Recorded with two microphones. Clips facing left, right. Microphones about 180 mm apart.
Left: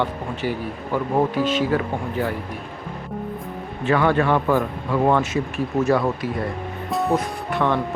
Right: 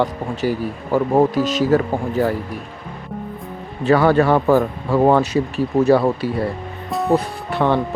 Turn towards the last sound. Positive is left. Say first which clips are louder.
# right 3 dB
turn(degrees=-35)  # may be behind; listen again after turning